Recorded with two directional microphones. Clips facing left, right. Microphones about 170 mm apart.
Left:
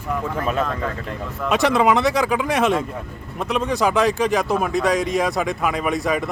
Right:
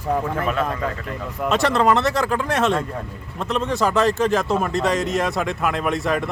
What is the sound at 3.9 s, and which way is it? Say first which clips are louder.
Speech: right 1 dB; 10° left (ahead or behind).